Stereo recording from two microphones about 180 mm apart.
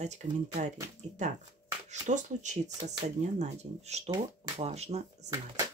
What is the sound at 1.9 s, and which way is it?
Speech, 40° right (ahead or behind).